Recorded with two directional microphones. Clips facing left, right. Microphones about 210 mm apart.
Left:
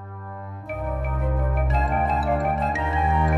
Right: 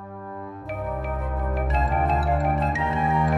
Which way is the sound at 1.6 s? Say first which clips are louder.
Right 1 dB; centre (ahead or behind).